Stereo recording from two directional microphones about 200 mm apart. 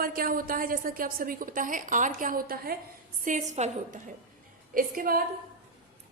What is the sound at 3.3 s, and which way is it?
A woman's voice, 35° right (ahead or behind).